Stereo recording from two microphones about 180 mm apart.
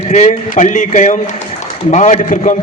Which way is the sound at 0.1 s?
40° left (ahead or behind).